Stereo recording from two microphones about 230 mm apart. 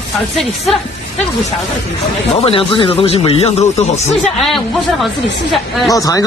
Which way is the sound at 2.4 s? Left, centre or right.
Left.